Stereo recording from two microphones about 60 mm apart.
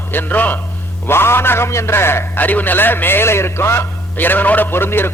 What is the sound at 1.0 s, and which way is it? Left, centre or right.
A man's voice, left.